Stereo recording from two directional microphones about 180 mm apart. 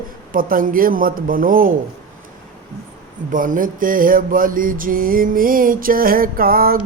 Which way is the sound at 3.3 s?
50° right (ahead or behind).